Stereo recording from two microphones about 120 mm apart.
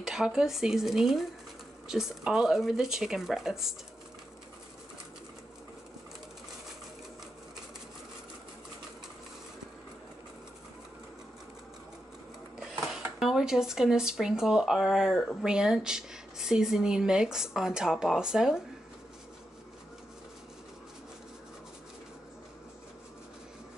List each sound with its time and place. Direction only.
0.0 s speech: 5° right (ahead or behind)
12.5 s speech: 5° right (ahead or behind)